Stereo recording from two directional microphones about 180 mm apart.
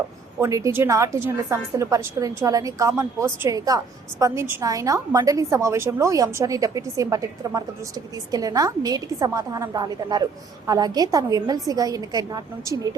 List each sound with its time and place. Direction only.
0.3 s a woman's voice: 15° right (ahead or behind)